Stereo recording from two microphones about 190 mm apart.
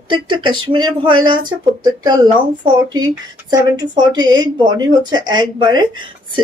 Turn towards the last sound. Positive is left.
turn(degrees=-25)  # may be behind; listen again after turning